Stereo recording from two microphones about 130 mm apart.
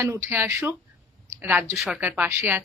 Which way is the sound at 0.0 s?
20° right (ahead or behind).